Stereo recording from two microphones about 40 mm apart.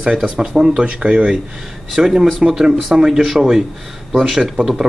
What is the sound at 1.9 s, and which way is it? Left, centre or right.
A man's voice, centre.